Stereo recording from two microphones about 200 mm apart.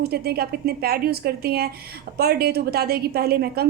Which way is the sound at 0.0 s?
50° right (ahead or behind).